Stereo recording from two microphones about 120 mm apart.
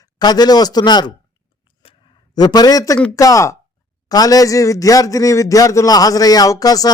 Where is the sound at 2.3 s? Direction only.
35° left (ahead or behind).